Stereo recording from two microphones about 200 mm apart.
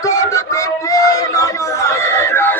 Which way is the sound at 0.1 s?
15° left (ahead or behind).